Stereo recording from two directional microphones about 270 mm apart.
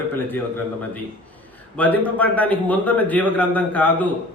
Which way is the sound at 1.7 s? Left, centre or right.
Centre.